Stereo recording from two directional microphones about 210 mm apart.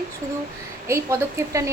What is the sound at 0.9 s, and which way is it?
Speech, 15° right (ahead or behind).